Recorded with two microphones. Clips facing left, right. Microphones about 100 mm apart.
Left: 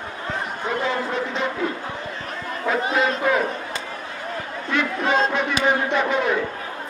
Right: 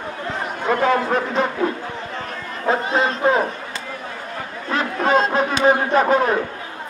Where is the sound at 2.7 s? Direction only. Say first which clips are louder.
Right 2 dB; 30° right (ahead or behind).